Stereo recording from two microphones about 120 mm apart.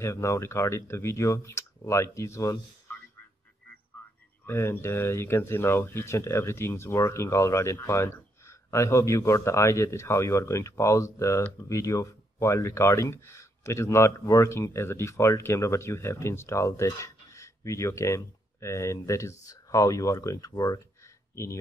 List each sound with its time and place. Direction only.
0.0 s speech: 25° left (ahead or behind)
4.5 s speech: 20° left (ahead or behind)